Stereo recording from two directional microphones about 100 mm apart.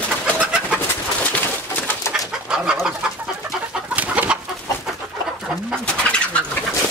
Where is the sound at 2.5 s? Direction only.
10° right (ahead or behind).